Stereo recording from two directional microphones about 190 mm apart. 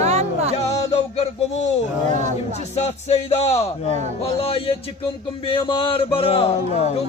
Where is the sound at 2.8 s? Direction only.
35° left (ahead or behind).